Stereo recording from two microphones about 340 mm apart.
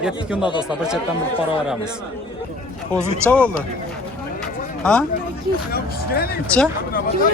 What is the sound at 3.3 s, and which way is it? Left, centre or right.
Speech, centre.